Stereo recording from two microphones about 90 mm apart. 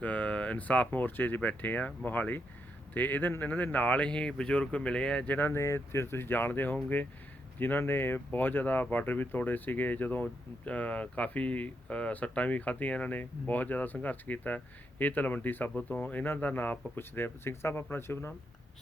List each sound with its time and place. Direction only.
0.0 s speech: 15° left (ahead or behind)
5.4 s speech: 30° left (ahead or behind)